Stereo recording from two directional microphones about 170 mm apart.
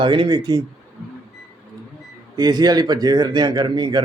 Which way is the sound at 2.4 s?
25° right (ahead or behind).